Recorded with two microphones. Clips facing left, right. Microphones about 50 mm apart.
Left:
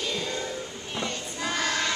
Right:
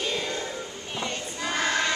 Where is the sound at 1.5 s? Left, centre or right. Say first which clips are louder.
Right 2 dB; right.